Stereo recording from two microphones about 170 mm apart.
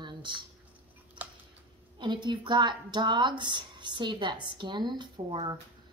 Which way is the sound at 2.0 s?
25° right (ahead or behind).